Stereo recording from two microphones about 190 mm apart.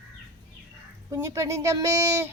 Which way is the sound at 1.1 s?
15° right (ahead or behind).